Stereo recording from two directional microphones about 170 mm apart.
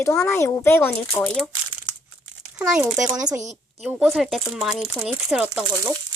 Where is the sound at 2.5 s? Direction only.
5° right (ahead or behind).